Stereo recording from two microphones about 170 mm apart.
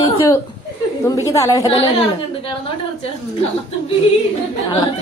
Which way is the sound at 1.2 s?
20° left (ahead or behind).